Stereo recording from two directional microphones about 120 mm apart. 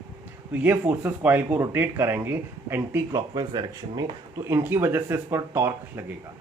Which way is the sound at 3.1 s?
35° right (ahead or behind).